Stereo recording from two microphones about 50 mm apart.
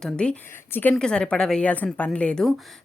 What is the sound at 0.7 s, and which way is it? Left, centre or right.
Speech, left.